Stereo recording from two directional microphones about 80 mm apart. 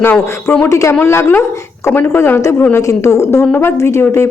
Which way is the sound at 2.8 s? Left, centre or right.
Left.